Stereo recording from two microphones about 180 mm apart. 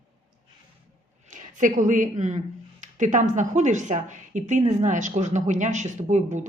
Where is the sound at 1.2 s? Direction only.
45° right (ahead or behind).